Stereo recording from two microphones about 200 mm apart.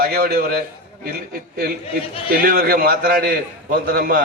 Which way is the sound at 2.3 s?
45° right (ahead or behind).